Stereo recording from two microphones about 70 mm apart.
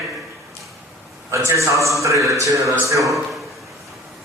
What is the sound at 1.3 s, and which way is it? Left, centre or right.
Mantra, right.